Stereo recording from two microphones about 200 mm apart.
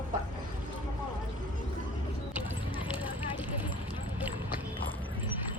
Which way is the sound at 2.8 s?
10° right (ahead or behind).